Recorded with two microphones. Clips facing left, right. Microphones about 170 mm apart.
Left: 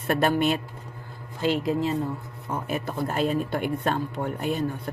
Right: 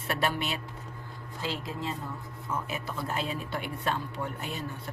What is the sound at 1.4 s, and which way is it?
Speech, 65° left (ahead or behind).